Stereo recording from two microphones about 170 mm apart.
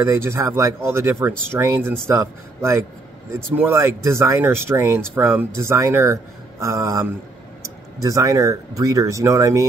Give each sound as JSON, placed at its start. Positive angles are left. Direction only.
{"t": 0.0, "sound": "speech", "side_deg": -15}